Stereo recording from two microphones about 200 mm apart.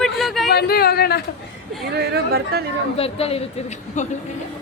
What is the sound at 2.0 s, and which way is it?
Speech, 55° right (ahead or behind).